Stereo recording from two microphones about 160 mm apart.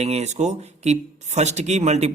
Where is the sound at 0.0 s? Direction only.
40° right (ahead or behind).